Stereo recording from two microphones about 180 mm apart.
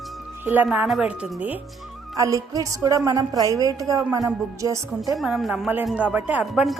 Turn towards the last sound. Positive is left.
turn(degrees=0)  # may be behind; listen again after turning